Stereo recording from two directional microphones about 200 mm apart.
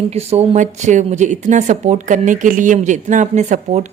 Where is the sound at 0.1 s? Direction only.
30° right (ahead or behind).